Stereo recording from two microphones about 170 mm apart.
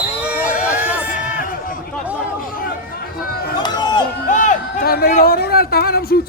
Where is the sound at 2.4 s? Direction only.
55° left (ahead or behind).